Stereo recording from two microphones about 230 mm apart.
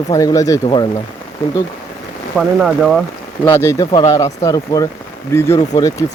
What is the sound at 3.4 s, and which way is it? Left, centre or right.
Speech, centre.